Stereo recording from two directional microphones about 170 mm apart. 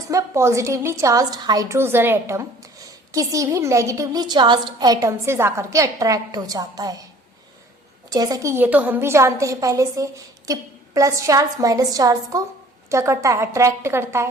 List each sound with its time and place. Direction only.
0.1 s a woman's voice: 15° right (ahead or behind)
8.1 s a woman's voice: 20° right (ahead or behind)